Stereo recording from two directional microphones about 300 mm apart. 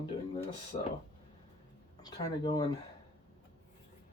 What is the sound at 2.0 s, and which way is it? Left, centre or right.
Speech, centre.